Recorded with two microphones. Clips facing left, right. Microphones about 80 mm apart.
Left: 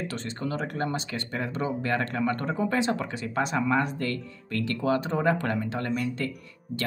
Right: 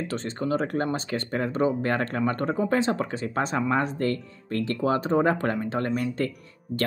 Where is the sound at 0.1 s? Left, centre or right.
Right.